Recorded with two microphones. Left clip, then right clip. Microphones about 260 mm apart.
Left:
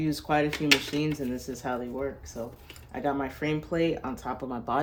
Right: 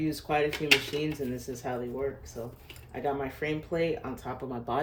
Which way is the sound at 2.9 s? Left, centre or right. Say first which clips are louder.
Left 2 dB; centre.